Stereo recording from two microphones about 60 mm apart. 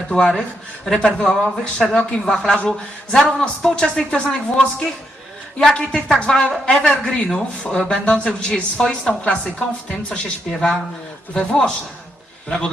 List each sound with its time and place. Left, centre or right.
0.1 s speech: centre
5.5 s speech: centre